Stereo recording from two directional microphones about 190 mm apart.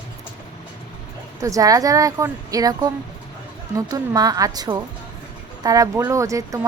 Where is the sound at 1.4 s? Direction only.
15° right (ahead or behind).